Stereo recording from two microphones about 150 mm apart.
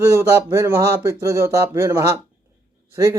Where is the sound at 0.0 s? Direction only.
15° right (ahead or behind).